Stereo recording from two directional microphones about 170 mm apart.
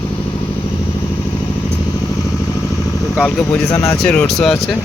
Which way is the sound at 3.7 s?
20° left (ahead or behind).